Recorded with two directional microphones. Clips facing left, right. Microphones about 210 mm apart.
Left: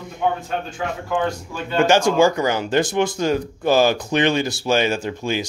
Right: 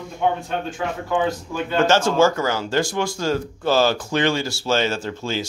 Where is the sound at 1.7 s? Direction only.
15° left (ahead or behind).